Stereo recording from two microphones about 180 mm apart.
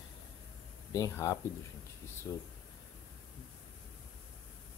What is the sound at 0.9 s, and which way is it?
Speech, 15° left (ahead or behind).